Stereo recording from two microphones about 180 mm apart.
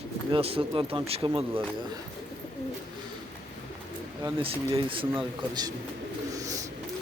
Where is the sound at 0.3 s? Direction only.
30° right (ahead or behind).